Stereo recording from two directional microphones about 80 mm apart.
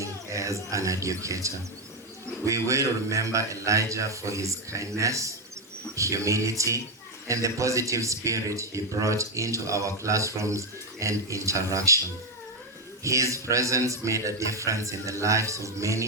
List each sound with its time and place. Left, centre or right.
0.0 s speech: right
13.1 s speech: right